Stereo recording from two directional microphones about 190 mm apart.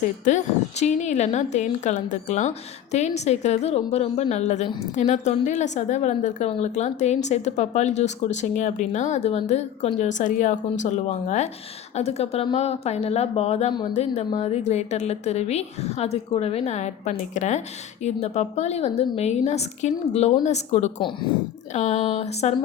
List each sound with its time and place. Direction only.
0.3 s a woman's voice: 40° left (ahead or behind)